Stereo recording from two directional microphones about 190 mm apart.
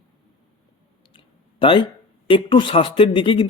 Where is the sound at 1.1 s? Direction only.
25° left (ahead or behind).